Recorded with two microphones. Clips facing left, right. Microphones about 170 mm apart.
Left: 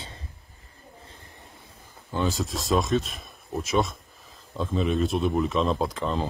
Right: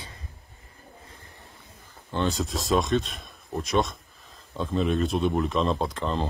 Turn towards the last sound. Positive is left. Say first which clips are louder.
# left 1 dB
turn(degrees=0)  # may be behind; listen again after turning